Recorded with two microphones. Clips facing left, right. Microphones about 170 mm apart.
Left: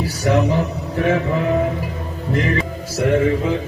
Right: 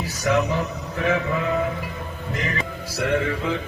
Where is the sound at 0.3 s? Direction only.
35° left (ahead or behind).